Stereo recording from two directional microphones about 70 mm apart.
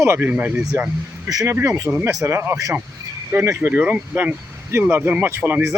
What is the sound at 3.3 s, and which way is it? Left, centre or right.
Speech, right.